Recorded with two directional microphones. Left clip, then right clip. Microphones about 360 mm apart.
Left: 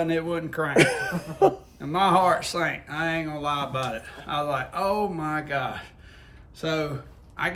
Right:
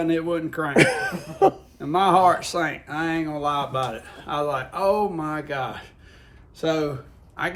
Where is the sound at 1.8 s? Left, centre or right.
Centre.